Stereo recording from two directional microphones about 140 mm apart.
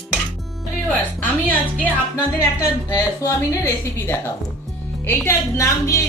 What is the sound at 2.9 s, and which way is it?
Speech, 25° left (ahead or behind).